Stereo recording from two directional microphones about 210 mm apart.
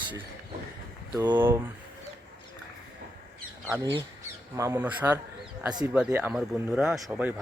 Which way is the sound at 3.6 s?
15° right (ahead or behind).